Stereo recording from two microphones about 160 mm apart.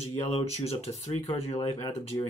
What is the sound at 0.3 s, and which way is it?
Speech, 40° left (ahead or behind).